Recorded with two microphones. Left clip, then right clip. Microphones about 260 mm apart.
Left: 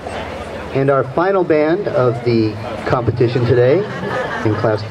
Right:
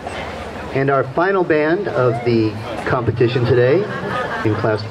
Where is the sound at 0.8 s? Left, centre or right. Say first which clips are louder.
Left 2 dB; left.